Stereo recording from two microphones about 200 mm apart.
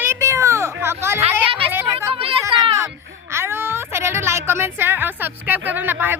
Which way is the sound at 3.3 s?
10° right (ahead or behind).